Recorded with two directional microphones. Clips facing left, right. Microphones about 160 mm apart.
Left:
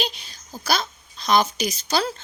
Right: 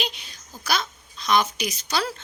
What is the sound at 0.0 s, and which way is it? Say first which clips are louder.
A woman's voice: left 3 dB; 35° left (ahead or behind).